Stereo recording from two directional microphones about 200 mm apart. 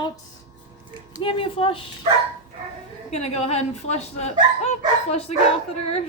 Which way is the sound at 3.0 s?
30° left (ahead or behind).